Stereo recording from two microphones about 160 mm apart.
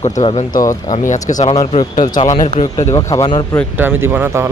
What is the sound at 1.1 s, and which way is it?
Speech, 50° left (ahead or behind).